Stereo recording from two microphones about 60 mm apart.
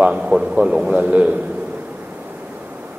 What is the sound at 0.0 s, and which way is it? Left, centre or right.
A man's voice, centre.